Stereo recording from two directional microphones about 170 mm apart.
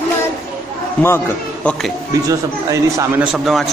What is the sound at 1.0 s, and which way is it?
Speech, 10° left (ahead or behind).